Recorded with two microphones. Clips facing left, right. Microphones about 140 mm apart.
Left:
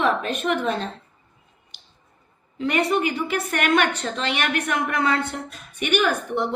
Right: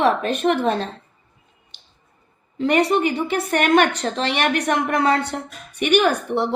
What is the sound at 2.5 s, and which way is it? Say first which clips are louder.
A woman's voice: right 4 dB; 35° right (ahead or behind).